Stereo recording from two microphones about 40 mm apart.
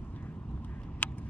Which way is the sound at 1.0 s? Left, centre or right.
Left.